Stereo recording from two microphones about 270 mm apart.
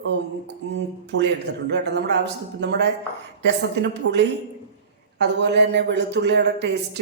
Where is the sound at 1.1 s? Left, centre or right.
Right.